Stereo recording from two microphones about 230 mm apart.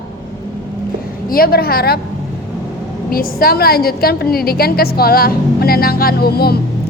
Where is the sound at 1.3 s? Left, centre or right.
Left.